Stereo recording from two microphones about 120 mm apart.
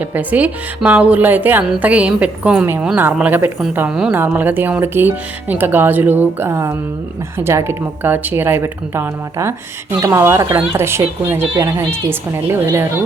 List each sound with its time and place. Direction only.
0.0 s speech: 15° right (ahead or behind)